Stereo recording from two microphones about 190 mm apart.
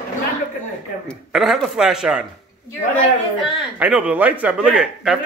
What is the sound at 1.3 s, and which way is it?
Speech, centre (ahead or behind).